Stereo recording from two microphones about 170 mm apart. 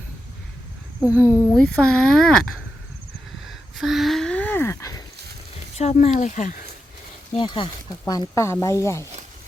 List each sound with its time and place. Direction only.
1.2 s speech: 15° left (ahead or behind)
1.5 s speech: 5° left (ahead or behind)
5.7 s speech: 40° left (ahead or behind)
7.3 s speech: 30° left (ahead or behind)